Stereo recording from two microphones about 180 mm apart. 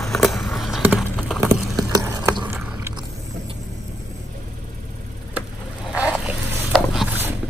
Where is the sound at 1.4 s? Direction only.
20° right (ahead or behind).